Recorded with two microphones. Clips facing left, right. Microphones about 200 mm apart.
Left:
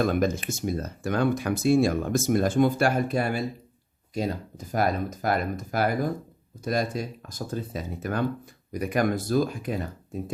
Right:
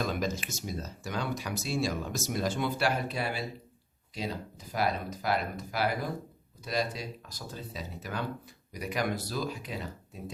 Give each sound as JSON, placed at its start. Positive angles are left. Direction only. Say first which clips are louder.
{"t": 0.0, "sound": "speech", "louder": "left 8 dB", "side_deg": 55}